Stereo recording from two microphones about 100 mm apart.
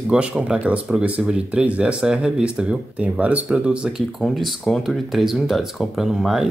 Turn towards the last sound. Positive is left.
turn(degrees=-5)  # may be behind; listen again after turning